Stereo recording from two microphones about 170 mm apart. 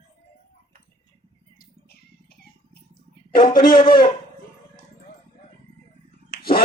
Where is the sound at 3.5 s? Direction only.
60° left (ahead or behind).